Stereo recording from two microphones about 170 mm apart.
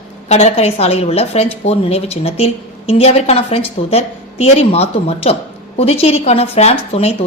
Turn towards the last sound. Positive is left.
turn(degrees=40)  # may be behind; listen again after turning